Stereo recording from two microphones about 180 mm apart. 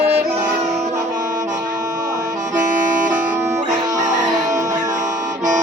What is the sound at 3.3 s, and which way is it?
Music, 15° right (ahead or behind).